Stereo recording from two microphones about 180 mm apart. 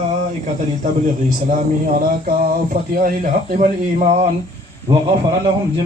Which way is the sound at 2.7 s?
55° right (ahead or behind).